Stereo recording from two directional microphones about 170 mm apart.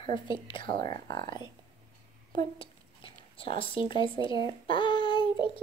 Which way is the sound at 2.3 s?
30° left (ahead or behind).